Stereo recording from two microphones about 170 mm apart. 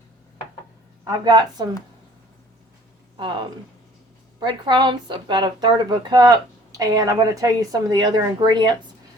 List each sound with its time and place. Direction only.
1.0 s speech: 20° right (ahead or behind)
3.2 s speech: 30° right (ahead or behind)